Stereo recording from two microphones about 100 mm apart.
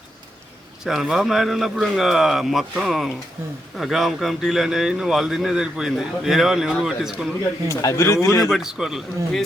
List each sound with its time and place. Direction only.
0.9 s speech: 5° right (ahead or behind)
7.7 s speech: 30° left (ahead or behind)
8.4 s speech: 5° right (ahead or behind)